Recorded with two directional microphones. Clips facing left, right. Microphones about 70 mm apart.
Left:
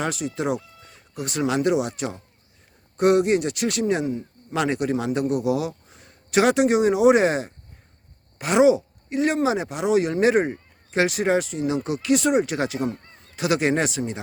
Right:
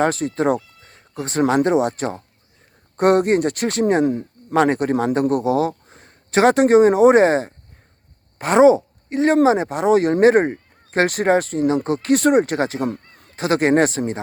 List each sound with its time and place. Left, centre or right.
0.0 s speech: right
4.0 s speech: right
4.5 s speech: right
13.3 s speech: right